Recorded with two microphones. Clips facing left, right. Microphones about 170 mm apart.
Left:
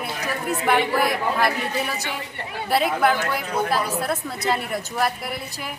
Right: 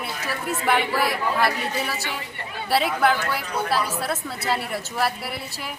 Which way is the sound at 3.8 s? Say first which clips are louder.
Left 2 dB; centre (ahead or behind).